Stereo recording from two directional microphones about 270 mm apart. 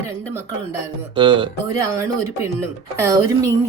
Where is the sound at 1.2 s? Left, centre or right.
Centre.